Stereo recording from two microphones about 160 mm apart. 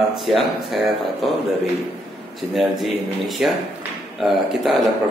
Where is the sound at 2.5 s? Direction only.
Centre (ahead or behind).